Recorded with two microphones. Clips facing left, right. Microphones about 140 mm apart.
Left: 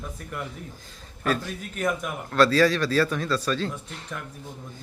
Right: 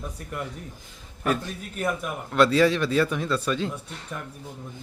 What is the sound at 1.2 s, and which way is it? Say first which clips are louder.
A man's voice: even; 15° right (ahead or behind).